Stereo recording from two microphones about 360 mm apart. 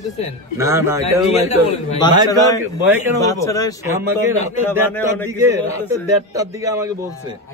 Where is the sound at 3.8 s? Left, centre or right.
Centre.